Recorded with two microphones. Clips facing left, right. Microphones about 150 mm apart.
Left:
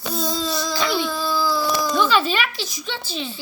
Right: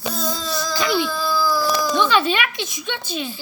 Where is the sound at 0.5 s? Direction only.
Centre (ahead or behind).